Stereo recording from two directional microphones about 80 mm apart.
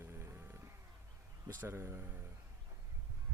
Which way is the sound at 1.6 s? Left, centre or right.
Right.